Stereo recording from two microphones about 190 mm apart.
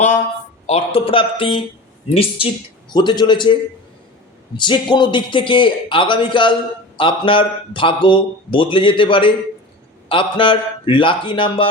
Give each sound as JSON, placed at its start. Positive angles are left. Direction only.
{"t": 0.7, "sound": "a man's voice", "side_deg": 30}
{"t": 2.9, "sound": "a man's voice", "side_deg": 25}